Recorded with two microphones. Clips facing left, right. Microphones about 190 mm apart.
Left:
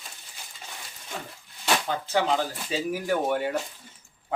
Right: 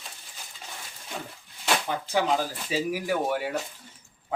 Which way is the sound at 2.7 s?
5° right (ahead or behind).